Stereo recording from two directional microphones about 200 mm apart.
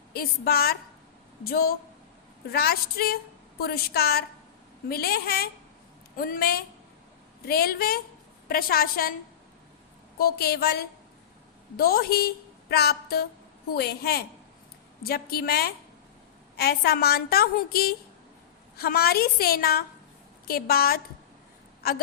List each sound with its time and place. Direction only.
0.1 s a woman's voice: 50° left (ahead or behind)
10.2 s a woman's voice: 50° left (ahead or behind)